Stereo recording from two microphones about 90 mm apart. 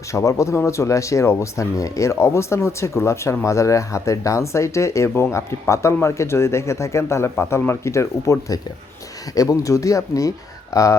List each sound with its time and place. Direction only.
0.1 s speech: 35° left (ahead or behind)